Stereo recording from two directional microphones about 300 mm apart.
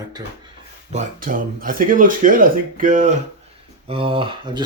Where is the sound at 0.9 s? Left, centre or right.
Right.